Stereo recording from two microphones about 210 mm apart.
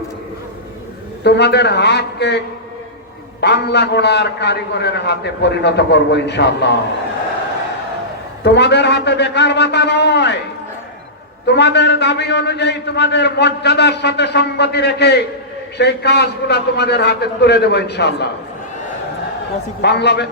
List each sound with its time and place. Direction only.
1.2 s a man's voice: 55° left (ahead or behind)
3.4 s a man's voice: 55° left (ahead or behind)
8.4 s a man's voice: 55° left (ahead or behind)
11.4 s a man's voice: 55° left (ahead or behind)
19.8 s a man's voice: 55° left (ahead or behind)